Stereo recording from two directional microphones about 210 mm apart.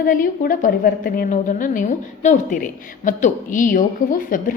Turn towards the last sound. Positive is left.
turn(degrees=40)  # may be behind; listen again after turning